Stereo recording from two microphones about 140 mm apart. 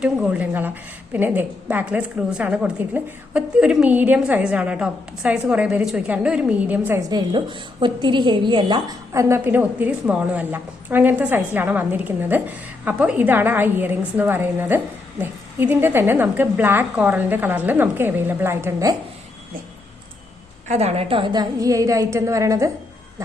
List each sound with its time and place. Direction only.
0.0 s a woman's voice: 5° right (ahead or behind)
7.1 s a woman's voice: 30° right (ahead or behind)
9.4 s a woman's voice: 10° right (ahead or behind)
20.7 s a woman's voice: 50° right (ahead or behind); by 22.7 s 25° right (ahead or behind)